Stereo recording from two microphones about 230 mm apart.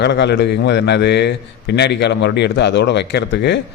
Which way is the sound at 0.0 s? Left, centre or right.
Left.